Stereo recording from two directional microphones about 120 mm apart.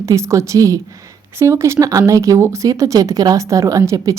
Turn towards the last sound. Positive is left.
turn(degrees=-25)  # may be behind; listen again after turning